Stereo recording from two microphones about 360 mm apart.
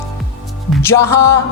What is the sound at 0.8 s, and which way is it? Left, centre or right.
Speech, centre.